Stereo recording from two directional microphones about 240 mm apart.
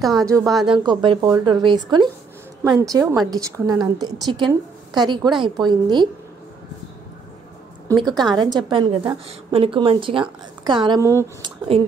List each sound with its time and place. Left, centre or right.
0.0 s speech: centre
0.7 s a woman's voice: right
7.9 s a woman's voice: centre